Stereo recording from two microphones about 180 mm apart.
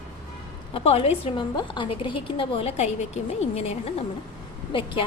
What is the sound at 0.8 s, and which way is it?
A woman's voice, 35° left (ahead or behind).